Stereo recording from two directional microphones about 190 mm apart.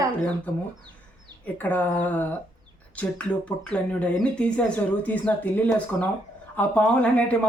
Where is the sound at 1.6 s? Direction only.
10° left (ahead or behind).